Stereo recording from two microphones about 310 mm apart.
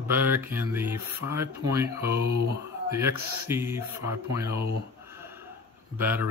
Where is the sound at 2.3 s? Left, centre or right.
Right.